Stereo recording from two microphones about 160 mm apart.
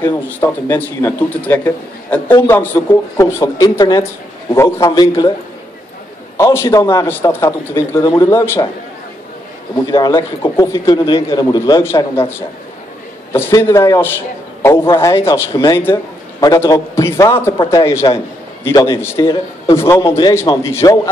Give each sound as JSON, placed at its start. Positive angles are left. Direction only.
{"t": 0.0, "sound": "a man's voice", "side_deg": 15}
{"t": 6.3, "sound": "a man's voice", "side_deg": 15}
{"t": 9.9, "sound": "a man's voice", "side_deg": 20}